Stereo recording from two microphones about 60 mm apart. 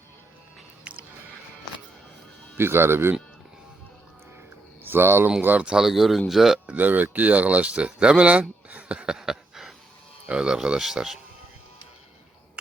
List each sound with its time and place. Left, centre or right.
0.9 s a sound: right
2.6 s speech: right
4.8 s speech: right
5.4 s speech: right
5.6 s speech: centre
6.7 s speech: right
9.1 s a sound: centre
10.2 s speech: centre